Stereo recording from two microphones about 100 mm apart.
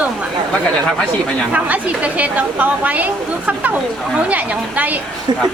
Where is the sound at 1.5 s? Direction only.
15° right (ahead or behind).